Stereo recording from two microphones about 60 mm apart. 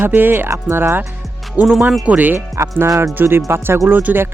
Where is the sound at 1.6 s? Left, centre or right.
Right.